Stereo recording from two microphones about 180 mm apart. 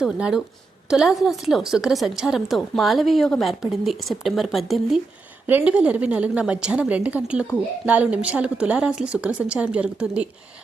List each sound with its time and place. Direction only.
0.0 s a woman's voice: 5° right (ahead or behind)